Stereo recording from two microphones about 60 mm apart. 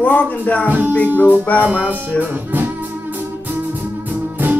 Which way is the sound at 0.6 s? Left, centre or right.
Right.